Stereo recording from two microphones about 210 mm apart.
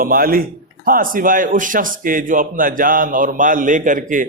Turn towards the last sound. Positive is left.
turn(degrees=-40)  # may be behind; listen again after turning